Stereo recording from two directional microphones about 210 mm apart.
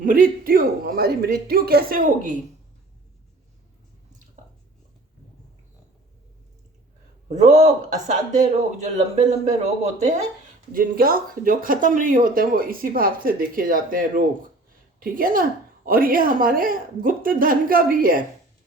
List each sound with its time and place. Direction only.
0.0 s speech: 40° right (ahead or behind)
7.3 s speech: 35° right (ahead or behind)